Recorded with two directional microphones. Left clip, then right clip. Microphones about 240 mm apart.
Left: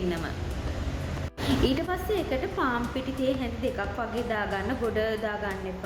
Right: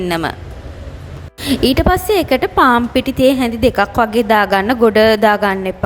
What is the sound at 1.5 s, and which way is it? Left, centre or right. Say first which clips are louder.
A woman's voice: right 14 dB; right.